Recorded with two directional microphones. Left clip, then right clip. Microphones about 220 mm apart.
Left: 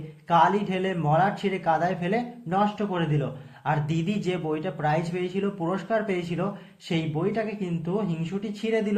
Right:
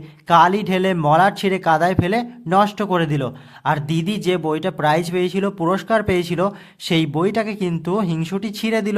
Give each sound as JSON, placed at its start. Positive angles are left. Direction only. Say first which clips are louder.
{"t": 0.3, "sound": "speech", "louder": "right 7 dB", "side_deg": -40}